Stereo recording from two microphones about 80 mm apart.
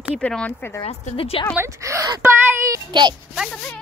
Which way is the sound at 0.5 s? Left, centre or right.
Left.